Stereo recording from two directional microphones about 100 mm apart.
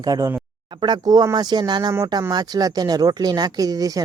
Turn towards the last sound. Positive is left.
turn(degrees=-35)  # may be behind; listen again after turning